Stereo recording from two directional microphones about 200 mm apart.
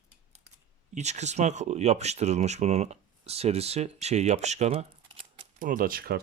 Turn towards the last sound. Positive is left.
turn(degrees=-50)  # may be behind; listen again after turning